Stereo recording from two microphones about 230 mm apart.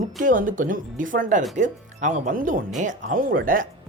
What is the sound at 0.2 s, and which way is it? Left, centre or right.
Speech, right.